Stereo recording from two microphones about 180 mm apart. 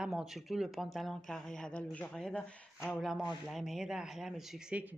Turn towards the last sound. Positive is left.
turn(degrees=-5)  # may be behind; listen again after turning